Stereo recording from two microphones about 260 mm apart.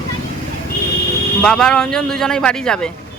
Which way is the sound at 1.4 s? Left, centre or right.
Centre.